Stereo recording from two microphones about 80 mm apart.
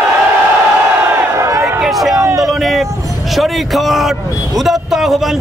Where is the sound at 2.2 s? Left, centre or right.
Right.